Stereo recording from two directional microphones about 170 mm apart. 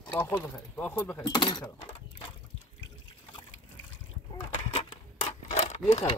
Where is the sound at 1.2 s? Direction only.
25° left (ahead or behind).